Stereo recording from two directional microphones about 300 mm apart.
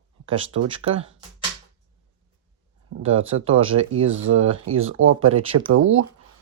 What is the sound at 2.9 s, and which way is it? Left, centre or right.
Speech, right.